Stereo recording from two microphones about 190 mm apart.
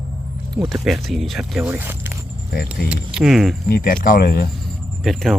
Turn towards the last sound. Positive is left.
turn(degrees=0)  # may be behind; listen again after turning